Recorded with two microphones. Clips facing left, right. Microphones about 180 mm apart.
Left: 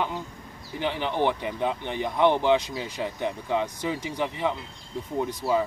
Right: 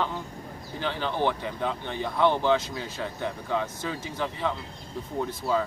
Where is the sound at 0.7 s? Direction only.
15° left (ahead or behind).